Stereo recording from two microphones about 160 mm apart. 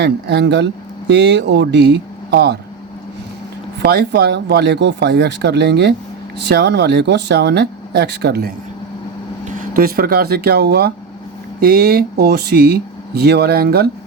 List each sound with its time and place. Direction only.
0.0 s speech: 90° right
3.8 s speech: 90° right
9.7 s speech: 70° right (ahead or behind); by 10.9 s 90° right
11.6 s speech: 70° right (ahead or behind)